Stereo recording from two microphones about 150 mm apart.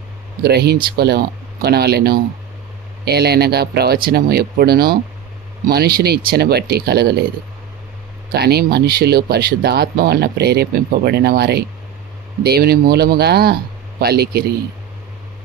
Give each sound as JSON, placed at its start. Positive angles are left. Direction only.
{"t": 0.4, "sound": "speech", "side_deg": -90}
{"t": 8.3, "sound": "speech", "side_deg": -90}